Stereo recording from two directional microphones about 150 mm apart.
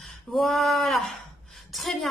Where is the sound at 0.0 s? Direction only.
Centre (ahead or behind).